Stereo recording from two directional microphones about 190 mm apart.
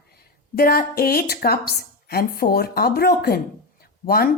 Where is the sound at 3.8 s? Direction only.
50° left (ahead or behind).